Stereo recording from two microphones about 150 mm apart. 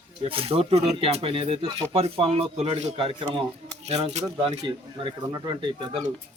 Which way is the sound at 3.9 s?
45° right (ahead or behind).